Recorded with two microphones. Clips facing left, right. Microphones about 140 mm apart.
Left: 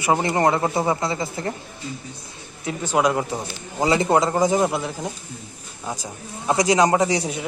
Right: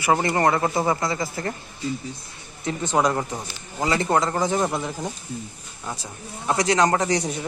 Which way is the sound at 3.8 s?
15° left (ahead or behind).